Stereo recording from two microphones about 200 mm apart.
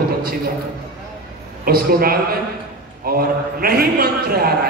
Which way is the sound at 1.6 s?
50° right (ahead or behind).